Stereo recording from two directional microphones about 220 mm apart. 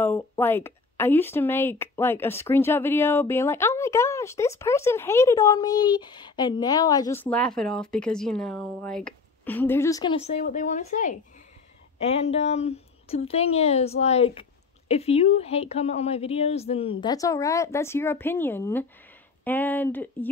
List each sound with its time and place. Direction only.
0.0 s speech: 10° left (ahead or behind)
10.2 s a woman's voice: 35° left (ahead or behind)
17.0 s speech: 15° left (ahead or behind)